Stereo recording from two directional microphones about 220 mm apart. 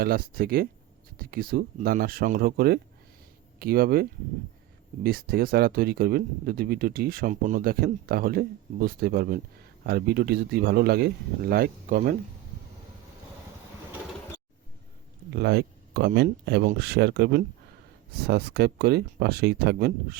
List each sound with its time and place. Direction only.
0.0 s speech: 40° right (ahead or behind)
5.0 s speech: 40° right (ahead or behind)
15.3 s speech: 45° right (ahead or behind)